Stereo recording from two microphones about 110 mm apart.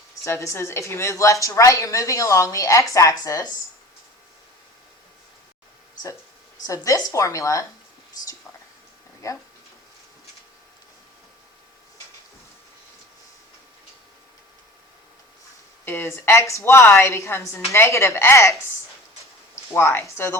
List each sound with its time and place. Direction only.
0.3 s a woman's voice: 25° left (ahead or behind)
6.7 s a woman's voice: 30° left (ahead or behind)
9.2 s a woman's voice: 30° left (ahead or behind)
15.8 s a woman's voice: 20° left (ahead or behind)
19.7 s a woman's voice: 20° left (ahead or behind)